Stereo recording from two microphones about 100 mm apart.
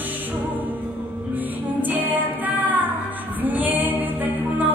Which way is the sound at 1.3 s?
20° right (ahead or behind).